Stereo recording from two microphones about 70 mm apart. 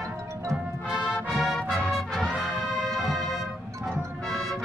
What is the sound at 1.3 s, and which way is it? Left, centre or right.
Music, centre.